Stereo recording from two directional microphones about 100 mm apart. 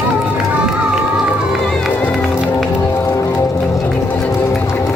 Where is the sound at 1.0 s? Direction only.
5° right (ahead or behind).